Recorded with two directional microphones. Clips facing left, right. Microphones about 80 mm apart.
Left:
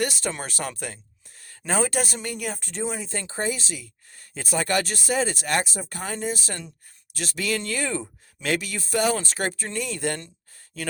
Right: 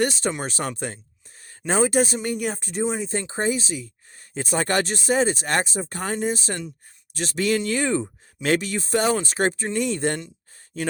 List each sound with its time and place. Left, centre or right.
0.0 s speech: right
6.0 s speech: right
6.3 s speech: right
7.7 s speech: right
8.4 s speech: right
9.1 s speech: right